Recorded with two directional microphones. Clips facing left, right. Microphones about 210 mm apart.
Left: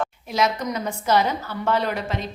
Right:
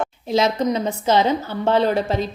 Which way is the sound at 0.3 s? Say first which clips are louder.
Right 6 dB; 30° right (ahead or behind).